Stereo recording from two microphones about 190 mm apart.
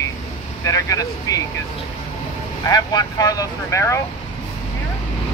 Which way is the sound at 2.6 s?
20° left (ahead or behind).